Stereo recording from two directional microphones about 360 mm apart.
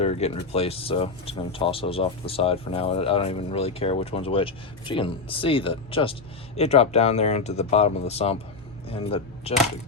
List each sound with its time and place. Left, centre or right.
0.0 s speech: centre